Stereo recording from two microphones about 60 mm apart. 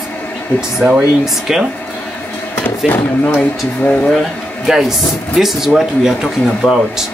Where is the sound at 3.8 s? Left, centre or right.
Left.